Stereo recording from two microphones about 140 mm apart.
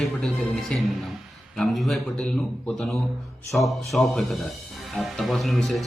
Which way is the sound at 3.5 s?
Centre (ahead or behind).